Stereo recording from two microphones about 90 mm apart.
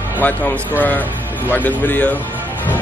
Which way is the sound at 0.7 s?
20° left (ahead or behind).